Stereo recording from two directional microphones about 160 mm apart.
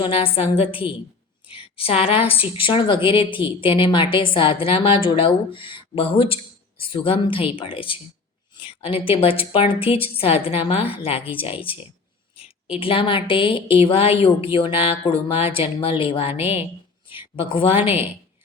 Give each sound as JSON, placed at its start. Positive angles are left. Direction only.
{"t": 0.0, "sound": "a woman's voice", "side_deg": 35}
{"t": 12.8, "sound": "a woman's voice", "side_deg": 35}
{"t": 17.3, "sound": "a woman's voice", "side_deg": 35}